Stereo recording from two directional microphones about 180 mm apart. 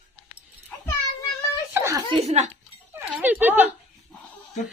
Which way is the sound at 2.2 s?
40° right (ahead or behind).